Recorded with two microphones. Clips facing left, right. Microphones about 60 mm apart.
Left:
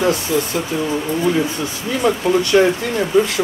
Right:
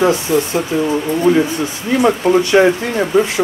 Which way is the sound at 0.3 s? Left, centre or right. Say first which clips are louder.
Right 4 dB; right.